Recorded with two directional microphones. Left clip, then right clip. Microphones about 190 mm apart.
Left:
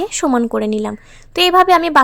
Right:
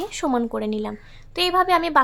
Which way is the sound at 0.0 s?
30° left (ahead or behind).